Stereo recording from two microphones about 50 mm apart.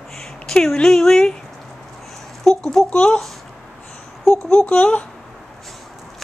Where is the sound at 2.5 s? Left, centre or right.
Centre.